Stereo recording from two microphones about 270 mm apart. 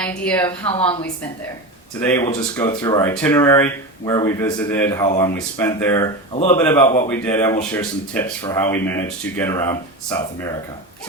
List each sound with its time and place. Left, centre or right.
0.0 s a woman's voice: centre
0.7 s a woman's voice: left
2.0 s speech: centre